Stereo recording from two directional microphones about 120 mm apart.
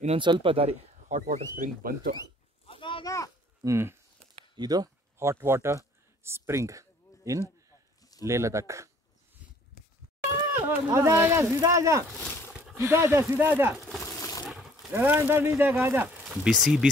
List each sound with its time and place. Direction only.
0.2 s speech: 45° right (ahead or behind)
1.0 s speech: 90° right
2.6 s a sound: 50° left (ahead or behind)
3.6 s speech: 20° right (ahead or behind)
4.6 s speech: 30° right (ahead or behind)
8.0 s a sound: 30° left (ahead or behind)
8.3 s speech: 25° right (ahead or behind)
10.5 s speech: 20° right (ahead or behind)
13.7 s speech: centre (ahead or behind)
14.0 s coin: 25° left (ahead or behind)
14.4 s a sound: centre (ahead or behind)
14.9 s speech: 15° right (ahead or behind)
16.3 s speech: centre (ahead or behind)